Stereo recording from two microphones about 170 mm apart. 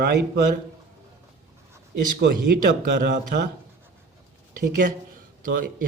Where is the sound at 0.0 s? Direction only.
75° right (ahead or behind).